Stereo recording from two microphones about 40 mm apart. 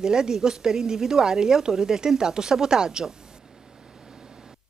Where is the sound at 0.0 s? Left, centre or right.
Centre.